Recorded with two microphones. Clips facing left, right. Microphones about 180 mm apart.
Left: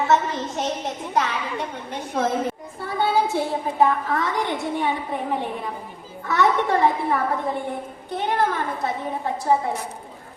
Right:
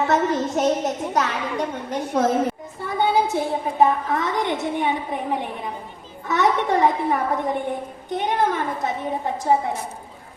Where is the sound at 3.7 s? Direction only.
20° right (ahead or behind).